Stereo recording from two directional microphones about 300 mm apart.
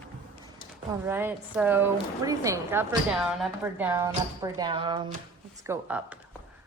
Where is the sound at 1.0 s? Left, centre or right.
Centre.